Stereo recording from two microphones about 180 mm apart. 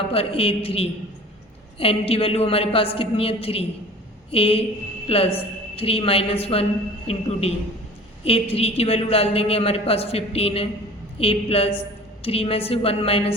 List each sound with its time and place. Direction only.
0.1 s a woman's voice: 30° left (ahead or behind)